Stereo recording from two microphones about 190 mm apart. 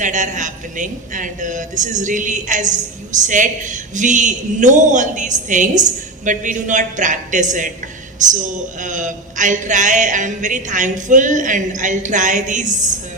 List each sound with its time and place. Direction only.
0.0 s a woman's voice: 40° right (ahead or behind)